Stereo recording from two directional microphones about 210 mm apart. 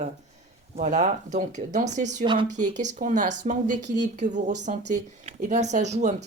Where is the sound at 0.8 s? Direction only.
35° right (ahead or behind).